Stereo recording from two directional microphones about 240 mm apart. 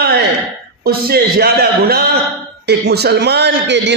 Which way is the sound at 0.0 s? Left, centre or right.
Right.